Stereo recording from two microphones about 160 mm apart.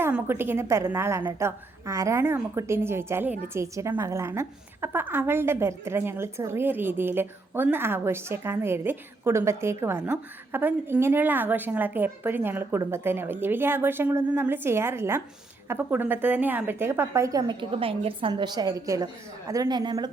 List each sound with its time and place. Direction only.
0.0 s a woman's voice: 15° right (ahead or behind)